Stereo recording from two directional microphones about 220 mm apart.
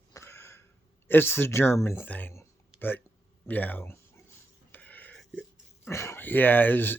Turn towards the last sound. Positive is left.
turn(degrees=10)  # may be behind; listen again after turning